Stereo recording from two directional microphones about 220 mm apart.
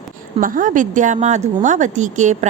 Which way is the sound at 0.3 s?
35° right (ahead or behind).